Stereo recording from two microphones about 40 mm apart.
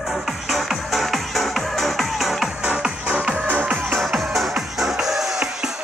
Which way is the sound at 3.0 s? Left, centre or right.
Right.